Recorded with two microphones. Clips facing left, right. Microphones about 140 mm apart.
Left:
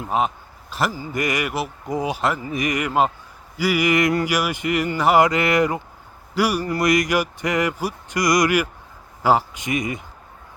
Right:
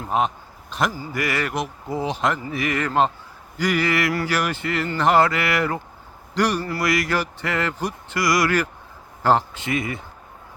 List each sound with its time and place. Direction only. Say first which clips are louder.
0.1 s a man's voice: even; centre (ahead or behind)
0.9 s a man's voice: left 1 dB; 20° left (ahead or behind)